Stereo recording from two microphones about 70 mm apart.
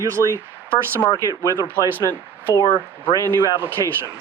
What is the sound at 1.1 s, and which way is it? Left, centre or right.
Speech, left.